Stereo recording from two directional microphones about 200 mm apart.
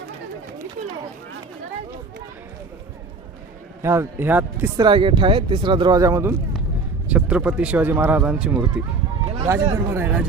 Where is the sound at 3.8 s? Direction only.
15° right (ahead or behind).